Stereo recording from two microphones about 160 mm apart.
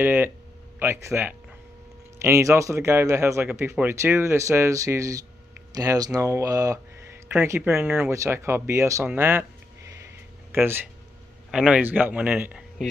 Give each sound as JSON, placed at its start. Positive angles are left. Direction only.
{"t": 0.0, "sound": "speech", "side_deg": -15}
{"t": 10.5, "sound": "speech", "side_deg": -15}